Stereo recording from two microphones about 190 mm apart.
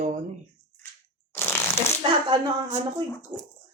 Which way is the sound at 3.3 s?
20° right (ahead or behind).